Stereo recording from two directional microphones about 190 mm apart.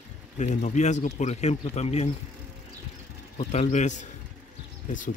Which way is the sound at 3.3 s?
40° left (ahead or behind).